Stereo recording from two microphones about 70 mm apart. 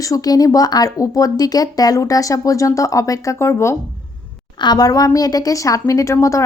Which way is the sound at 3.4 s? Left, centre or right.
Left.